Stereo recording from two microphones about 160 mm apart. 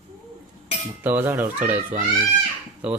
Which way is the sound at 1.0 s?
10° right (ahead or behind).